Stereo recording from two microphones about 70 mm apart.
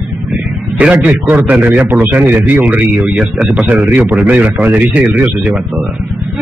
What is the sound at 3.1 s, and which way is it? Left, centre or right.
Speech, centre.